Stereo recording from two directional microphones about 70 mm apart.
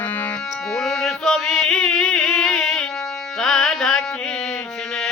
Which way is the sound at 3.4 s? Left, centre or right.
Centre.